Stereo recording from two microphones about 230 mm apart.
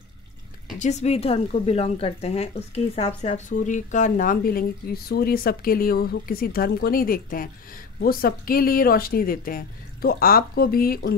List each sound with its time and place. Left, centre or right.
0.7 s speech: left